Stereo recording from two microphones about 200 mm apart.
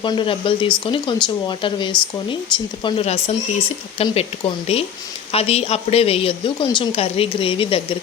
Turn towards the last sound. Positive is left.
turn(degrees=25)  # may be behind; listen again after turning